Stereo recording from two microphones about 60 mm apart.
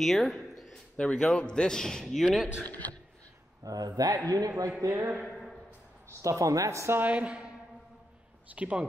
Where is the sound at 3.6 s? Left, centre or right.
Right.